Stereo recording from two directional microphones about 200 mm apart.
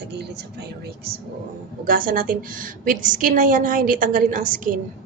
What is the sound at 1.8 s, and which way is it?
A woman's voice, 45° right (ahead or behind).